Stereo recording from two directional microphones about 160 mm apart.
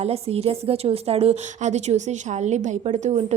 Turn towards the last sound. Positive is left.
turn(degrees=-40)  # may be behind; listen again after turning